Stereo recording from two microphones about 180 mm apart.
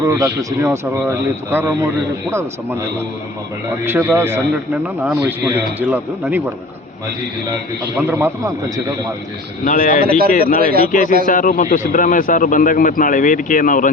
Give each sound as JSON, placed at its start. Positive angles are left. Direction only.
{"t": 0.0, "sound": "speech", "side_deg": -15}
{"t": 3.8, "sound": "speech", "side_deg": -10}
{"t": 7.9, "sound": "speech", "side_deg": -15}
{"t": 9.6, "sound": "a man's voice", "side_deg": 45}
{"t": 10.2, "sound": "speech", "side_deg": -55}
{"t": 10.8, "sound": "a man's voice", "side_deg": 45}